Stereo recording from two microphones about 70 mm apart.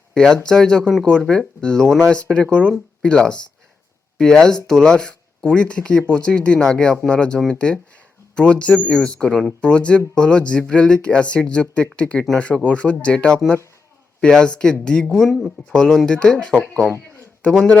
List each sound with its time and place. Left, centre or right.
0.1 s speech: centre